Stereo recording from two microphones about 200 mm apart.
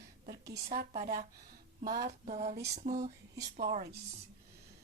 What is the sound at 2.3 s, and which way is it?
Speech, 35° right (ahead or behind).